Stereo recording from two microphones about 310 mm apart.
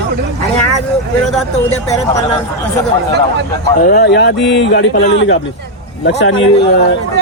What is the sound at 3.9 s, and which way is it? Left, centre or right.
Speech, left.